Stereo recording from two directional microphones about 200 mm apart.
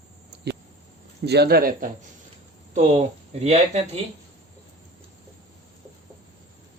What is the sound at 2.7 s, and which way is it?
A woman's voice, 30° right (ahead or behind).